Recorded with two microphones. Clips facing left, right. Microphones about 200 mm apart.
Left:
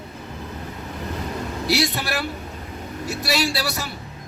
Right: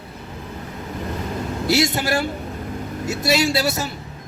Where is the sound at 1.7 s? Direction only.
25° right (ahead or behind).